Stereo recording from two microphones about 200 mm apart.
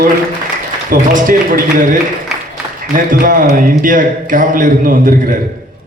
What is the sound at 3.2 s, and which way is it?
A man's voice, 45° right (ahead or behind).